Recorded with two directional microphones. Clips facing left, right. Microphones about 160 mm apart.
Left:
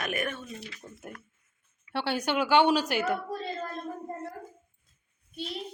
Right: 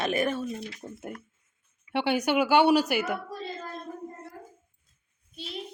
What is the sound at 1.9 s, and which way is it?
Speech, 15° right (ahead or behind).